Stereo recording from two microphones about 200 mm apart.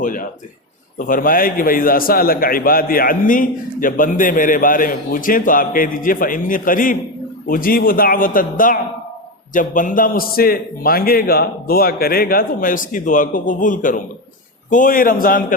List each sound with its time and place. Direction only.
0.0 s a man's voice: 45° left (ahead or behind)